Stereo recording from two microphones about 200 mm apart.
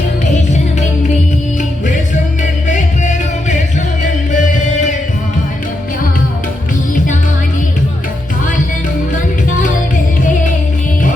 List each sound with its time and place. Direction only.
2.4 s music: 40° left (ahead or behind)
9.6 s music: 40° left (ahead or behind)